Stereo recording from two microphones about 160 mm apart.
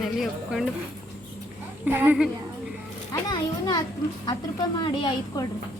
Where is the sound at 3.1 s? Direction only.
25° left (ahead or behind).